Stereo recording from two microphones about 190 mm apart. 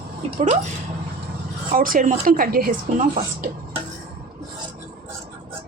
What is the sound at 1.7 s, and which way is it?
Speech, 45° right (ahead or behind).